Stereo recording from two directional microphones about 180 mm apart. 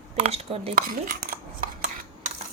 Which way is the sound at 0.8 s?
50° right (ahead or behind).